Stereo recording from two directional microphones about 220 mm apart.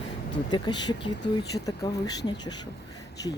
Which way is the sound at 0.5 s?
20° left (ahead or behind).